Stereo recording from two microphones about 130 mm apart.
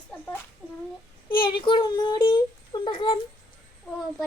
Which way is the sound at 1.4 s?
40° left (ahead or behind).